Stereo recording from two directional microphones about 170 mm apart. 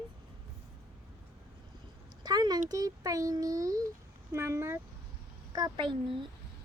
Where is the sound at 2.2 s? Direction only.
25° right (ahead or behind).